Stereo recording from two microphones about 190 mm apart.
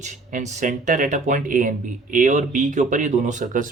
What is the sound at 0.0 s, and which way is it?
Speech, 40° right (ahead or behind).